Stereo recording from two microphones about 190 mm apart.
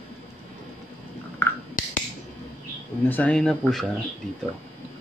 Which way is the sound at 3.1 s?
10° left (ahead or behind).